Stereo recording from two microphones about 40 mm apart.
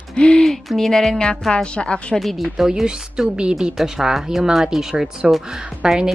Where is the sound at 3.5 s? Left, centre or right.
Centre.